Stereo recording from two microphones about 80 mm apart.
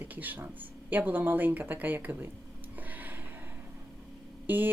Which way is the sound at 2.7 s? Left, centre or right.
Right.